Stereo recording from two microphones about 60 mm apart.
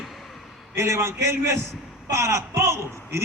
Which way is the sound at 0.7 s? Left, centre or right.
Right.